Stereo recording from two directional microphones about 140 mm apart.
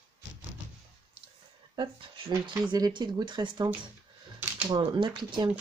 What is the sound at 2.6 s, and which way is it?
Speech, 25° right (ahead or behind).